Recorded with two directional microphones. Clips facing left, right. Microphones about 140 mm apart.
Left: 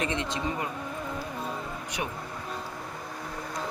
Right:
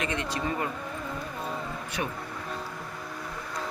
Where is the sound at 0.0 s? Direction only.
25° left (ahead or behind).